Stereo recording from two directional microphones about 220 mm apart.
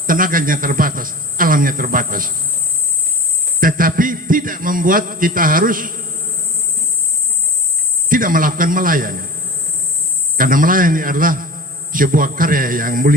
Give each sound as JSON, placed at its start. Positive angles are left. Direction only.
{"t": 0.1, "sound": "a man's voice", "side_deg": -40}
{"t": 3.6, "sound": "a man's voice", "side_deg": -40}
{"t": 8.1, "sound": "a man's voice", "side_deg": -40}
{"t": 10.3, "sound": "a man's voice", "side_deg": -40}